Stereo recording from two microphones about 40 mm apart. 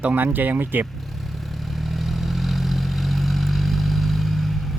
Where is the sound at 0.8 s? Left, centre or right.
Centre.